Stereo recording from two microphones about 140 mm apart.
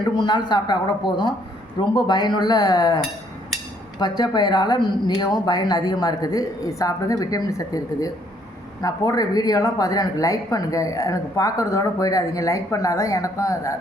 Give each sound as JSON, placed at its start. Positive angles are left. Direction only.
{"t": 0.2, "sound": "a woman's voice", "side_deg": 30}
{"t": 4.0, "sound": "a woman's voice", "side_deg": 30}